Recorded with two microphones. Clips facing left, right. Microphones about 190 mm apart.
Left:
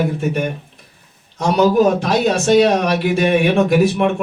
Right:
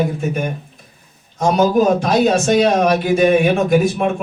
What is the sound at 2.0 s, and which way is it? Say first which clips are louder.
A man's voice: right 2 dB; 65° left (ahead or behind).